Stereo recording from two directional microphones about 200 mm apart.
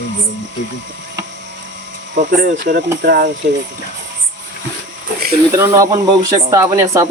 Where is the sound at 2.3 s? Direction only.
55° right (ahead or behind).